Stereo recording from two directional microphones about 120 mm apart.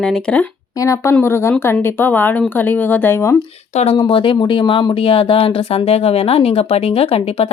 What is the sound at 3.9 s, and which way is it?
Speech, 45° left (ahead or behind).